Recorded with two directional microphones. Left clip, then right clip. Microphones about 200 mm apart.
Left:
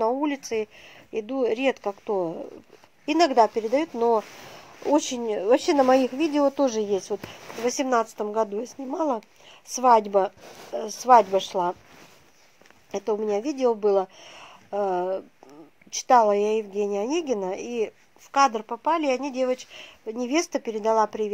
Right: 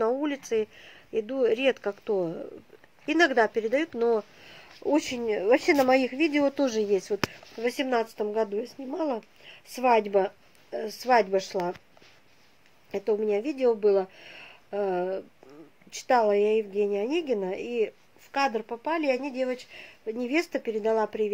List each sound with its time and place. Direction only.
0.2 s a woman's voice: 10° left (ahead or behind)
2.1 s speech: 40° left (ahead or behind)
3.1 s a woman's voice: 10° left (ahead or behind)
12.9 s a woman's voice: 15° left (ahead or behind)